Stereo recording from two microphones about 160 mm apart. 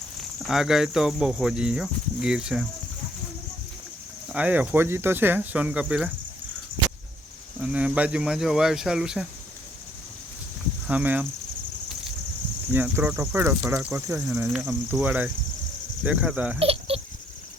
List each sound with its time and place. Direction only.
0.4 s cricket: centre (ahead or behind)
4.3 s speech: 10° right (ahead or behind)
7.6 s cricket: 5° right (ahead or behind)
10.8 s speech: 10° right (ahead or behind)
12.7 s speech: 10° right (ahead or behind)
16.6 s a sound: 35° right (ahead or behind)